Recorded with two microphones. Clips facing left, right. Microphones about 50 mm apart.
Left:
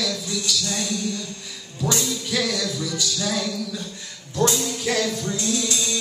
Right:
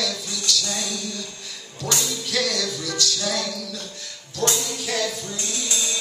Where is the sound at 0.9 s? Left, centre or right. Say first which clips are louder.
Left 4 dB; centre.